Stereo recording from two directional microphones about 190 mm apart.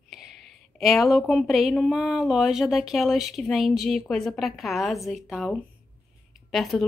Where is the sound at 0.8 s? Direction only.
Centre (ahead or behind).